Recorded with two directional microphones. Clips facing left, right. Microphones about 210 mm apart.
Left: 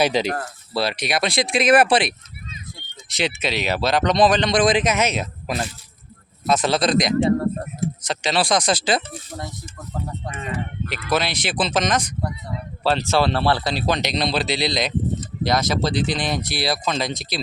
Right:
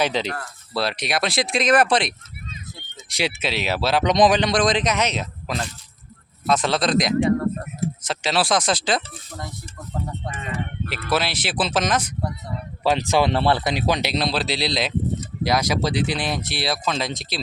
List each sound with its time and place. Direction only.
0.0 s speech: 10° left (ahead or behind)
0.3 s speech: 45° left (ahead or behind)
0.7 s speech: centre (ahead or behind)
3.1 s speech: 10° right (ahead or behind)
4.5 s speech: 5° left (ahead or behind)
7.3 s speech: 30° left (ahead or behind)
8.0 s speech: 5° right (ahead or behind)
11.1 s speech: 5° right (ahead or behind)